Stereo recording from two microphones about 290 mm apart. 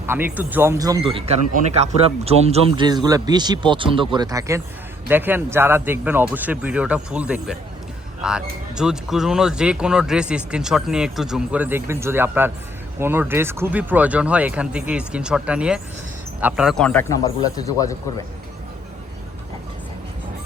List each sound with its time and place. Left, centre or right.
0.1 s a man's voice: centre